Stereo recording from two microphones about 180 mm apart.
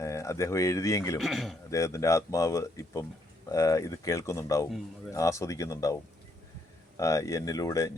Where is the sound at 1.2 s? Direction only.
Centre (ahead or behind).